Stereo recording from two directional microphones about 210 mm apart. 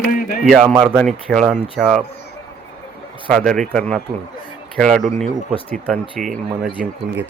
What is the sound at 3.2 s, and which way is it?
Speech, centre (ahead or behind).